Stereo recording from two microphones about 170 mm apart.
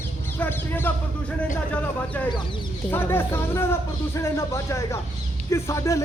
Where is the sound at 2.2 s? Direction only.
10° left (ahead or behind).